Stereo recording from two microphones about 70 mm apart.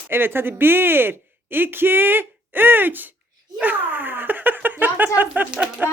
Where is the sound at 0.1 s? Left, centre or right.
Right.